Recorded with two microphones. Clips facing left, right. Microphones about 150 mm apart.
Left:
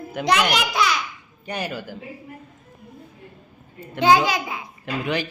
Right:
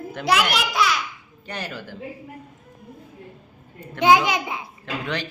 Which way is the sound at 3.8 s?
15° right (ahead or behind).